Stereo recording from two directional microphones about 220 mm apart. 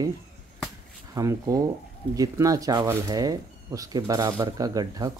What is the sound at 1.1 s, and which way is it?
Speech, 15° right (ahead or behind).